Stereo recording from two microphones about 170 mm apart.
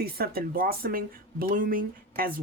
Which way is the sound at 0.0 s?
60° right (ahead or behind).